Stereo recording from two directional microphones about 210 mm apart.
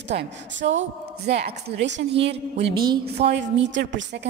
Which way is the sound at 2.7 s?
20° right (ahead or behind).